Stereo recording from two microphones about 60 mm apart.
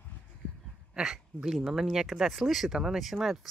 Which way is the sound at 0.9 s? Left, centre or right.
Centre.